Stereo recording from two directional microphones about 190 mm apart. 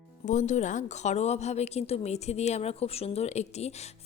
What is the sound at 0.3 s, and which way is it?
A woman's voice, 40° left (ahead or behind).